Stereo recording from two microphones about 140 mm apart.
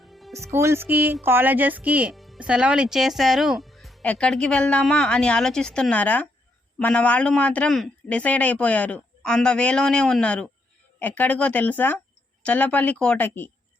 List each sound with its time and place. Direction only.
0.0 s music: centre (ahead or behind)
0.3 s speech: 20° right (ahead or behind)
2.1 s speech: centre (ahead or behind); by 13.5 s 15° left (ahead or behind)